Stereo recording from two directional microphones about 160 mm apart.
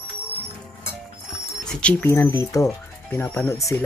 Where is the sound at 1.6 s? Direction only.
5° left (ahead or behind).